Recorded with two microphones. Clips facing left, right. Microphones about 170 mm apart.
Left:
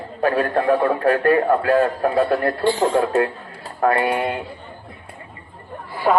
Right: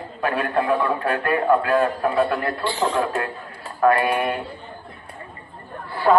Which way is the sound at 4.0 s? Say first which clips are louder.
Left 1 dB; 25° left (ahead or behind).